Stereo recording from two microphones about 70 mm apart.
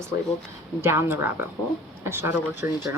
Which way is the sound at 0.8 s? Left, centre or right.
Right.